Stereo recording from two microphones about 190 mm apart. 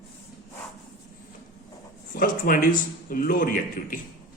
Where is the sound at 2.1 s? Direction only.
45° left (ahead or behind).